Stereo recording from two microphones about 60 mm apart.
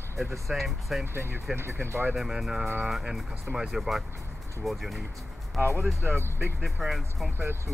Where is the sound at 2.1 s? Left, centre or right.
Centre.